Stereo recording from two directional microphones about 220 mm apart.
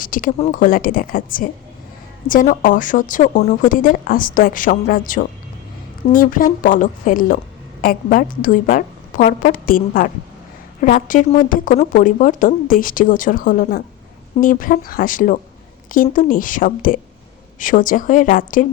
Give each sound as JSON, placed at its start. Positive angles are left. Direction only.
{"t": 0.0, "sound": "speech", "side_deg": 40}